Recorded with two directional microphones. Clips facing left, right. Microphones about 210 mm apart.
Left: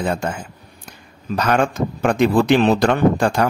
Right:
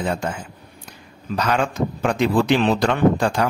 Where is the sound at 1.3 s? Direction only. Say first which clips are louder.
Left 3 dB; 50° left (ahead or behind).